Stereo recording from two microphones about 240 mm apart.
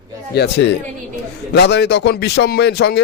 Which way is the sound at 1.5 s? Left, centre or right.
Left.